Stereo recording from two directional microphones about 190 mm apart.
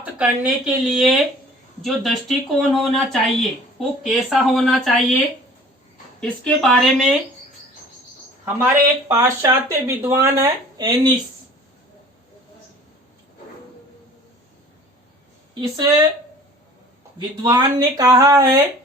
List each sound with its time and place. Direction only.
0.0 s speech: 5° right (ahead or behind)
6.1 s speech: 5° left (ahead or behind)
8.5 s speech: 10° right (ahead or behind)
15.7 s speech: 20° right (ahead or behind)
17.4 s speech: 20° right (ahead or behind)